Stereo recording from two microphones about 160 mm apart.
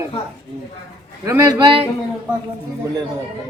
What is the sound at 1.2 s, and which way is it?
Speech, 20° right (ahead or behind).